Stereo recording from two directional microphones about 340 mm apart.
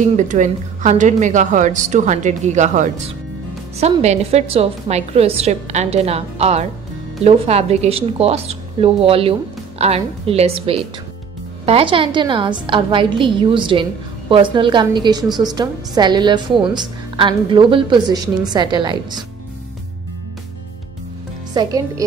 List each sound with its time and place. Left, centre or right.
0.0 s a woman's voice: right
21.5 s a woman's voice: centre